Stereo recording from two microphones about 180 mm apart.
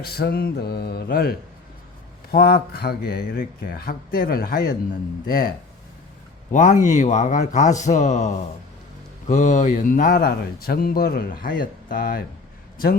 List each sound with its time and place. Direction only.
0.0 s speech: 60° left (ahead or behind)
6.5 s speech: 45° left (ahead or behind)